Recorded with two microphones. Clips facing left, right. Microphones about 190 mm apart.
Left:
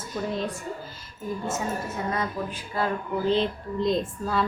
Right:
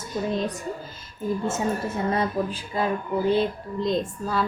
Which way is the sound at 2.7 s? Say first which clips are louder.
Right 2 dB; 20° right (ahead or behind).